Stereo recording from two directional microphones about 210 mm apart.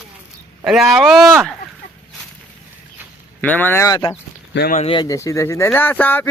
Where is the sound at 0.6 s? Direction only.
Centre (ahead or behind).